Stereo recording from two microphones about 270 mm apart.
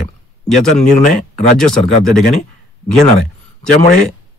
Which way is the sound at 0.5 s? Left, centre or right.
Centre.